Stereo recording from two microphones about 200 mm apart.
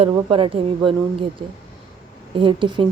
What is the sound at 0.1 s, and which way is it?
Speech, 25° right (ahead or behind).